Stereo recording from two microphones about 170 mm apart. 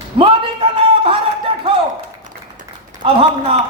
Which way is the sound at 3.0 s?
35° right (ahead or behind).